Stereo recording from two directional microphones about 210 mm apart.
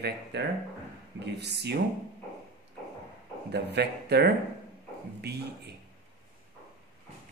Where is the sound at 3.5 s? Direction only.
50° right (ahead or behind).